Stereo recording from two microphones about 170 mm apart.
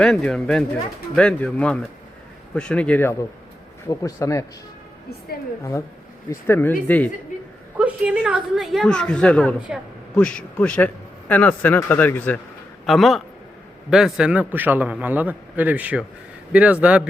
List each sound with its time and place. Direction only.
0.0 s a woman's voice: 5° left (ahead or behind)
6.5 s speech: 10° left (ahead or behind)
7.8 s a woman's voice: 10° right (ahead or behind)
9.6 s a man's voice: 5° right (ahead or behind)
10.2 s a woman's voice: 5° left (ahead or behind)
12.8 s a man's voice: centre (ahead or behind)